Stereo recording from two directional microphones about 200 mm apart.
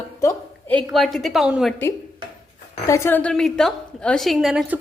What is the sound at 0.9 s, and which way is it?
Speech, centre (ahead or behind).